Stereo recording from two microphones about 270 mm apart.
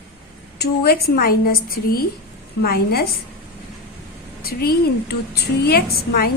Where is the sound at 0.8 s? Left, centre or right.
Left.